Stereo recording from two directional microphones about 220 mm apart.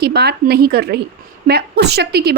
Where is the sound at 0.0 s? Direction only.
45° right (ahead or behind).